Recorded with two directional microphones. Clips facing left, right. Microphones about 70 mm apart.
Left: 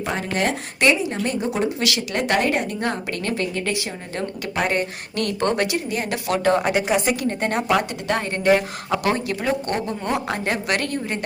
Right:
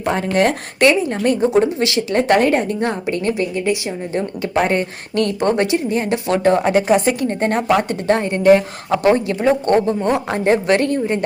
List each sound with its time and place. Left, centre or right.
0.2 s speech: right
1.5 s a woman's voice: right
5.4 s a woman's voice: right